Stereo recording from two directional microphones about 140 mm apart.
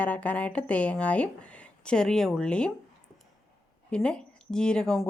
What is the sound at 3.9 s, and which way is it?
Speech, 5° left (ahead or behind).